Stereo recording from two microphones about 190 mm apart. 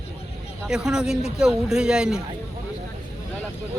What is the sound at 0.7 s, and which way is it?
A man's voice, 5° right (ahead or behind).